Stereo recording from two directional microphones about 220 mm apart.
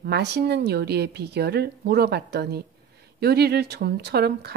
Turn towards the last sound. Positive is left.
turn(degrees=-45)  # may be behind; listen again after turning